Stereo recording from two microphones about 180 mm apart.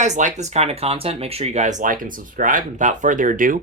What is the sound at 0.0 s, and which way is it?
Speech, 40° right (ahead or behind).